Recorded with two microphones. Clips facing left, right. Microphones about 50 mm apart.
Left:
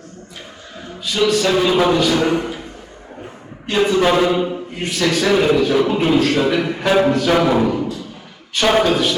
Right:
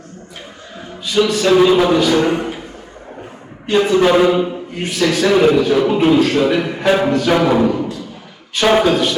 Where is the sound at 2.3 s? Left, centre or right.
Right.